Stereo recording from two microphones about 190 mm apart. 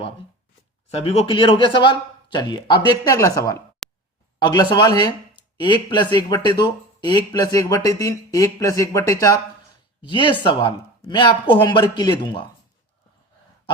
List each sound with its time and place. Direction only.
0.9 s speech: 35° left (ahead or behind); by 3.6 s 15° left (ahead or behind)
3.8 s a sound: centre (ahead or behind)
4.4 s speech: 20° left (ahead or behind)